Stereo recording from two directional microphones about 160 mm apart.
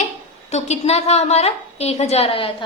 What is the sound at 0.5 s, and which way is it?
A woman's voice, 45° left (ahead or behind).